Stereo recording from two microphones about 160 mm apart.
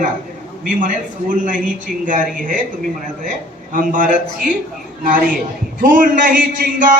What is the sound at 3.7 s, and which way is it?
Speech, 55° right (ahead or behind).